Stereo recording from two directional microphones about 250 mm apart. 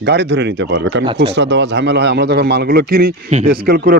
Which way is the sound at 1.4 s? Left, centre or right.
Right.